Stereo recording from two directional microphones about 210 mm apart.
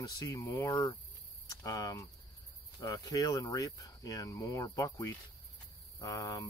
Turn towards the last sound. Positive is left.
turn(degrees=15)  # may be behind; listen again after turning